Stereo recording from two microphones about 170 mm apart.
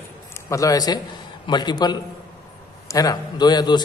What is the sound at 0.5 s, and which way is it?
A man's voice, 20° left (ahead or behind).